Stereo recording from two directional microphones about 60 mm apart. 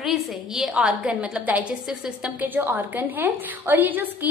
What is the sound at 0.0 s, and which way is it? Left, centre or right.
Speech, centre.